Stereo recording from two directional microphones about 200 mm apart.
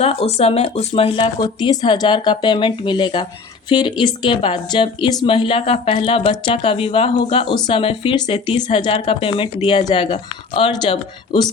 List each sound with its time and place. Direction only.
0.0 s speech: 30° left (ahead or behind)